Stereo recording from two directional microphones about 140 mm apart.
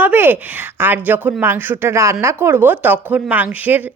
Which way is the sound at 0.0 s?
15° right (ahead or behind).